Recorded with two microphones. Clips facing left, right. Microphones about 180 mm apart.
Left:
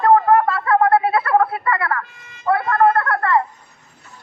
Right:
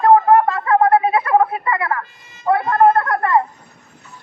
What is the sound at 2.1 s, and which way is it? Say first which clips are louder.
Emergency vehicle: left 2 dB; 60° left (ahead or behind).